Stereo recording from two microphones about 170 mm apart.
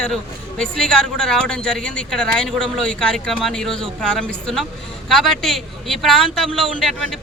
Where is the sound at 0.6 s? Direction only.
5° left (ahead or behind).